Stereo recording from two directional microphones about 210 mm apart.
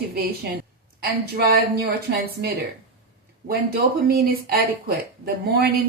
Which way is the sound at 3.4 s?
45° right (ahead or behind).